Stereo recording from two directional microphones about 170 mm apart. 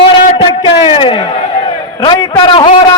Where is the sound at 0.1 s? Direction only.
35° left (ahead or behind).